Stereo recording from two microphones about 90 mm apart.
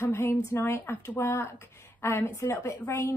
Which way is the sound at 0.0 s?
25° left (ahead or behind).